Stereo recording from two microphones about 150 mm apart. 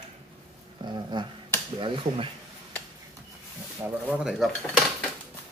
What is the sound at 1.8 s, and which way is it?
Speech, 35° right (ahead or behind).